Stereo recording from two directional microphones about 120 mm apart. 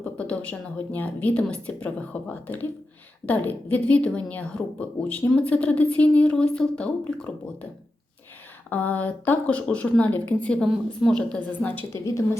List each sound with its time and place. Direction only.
0.0 s a woman's voice: 10° left (ahead or behind)
8.7 s a woman's voice: 15° left (ahead or behind)
12.0 s a woman's voice: 25° left (ahead or behind)